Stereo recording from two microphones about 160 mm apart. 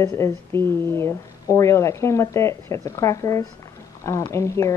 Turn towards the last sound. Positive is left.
turn(degrees=20)  # may be behind; listen again after turning